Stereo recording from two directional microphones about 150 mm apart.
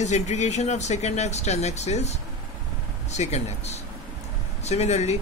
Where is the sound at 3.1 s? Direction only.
50° left (ahead or behind).